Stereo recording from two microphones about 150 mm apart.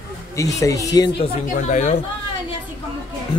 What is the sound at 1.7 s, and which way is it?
Speech, 55° left (ahead or behind).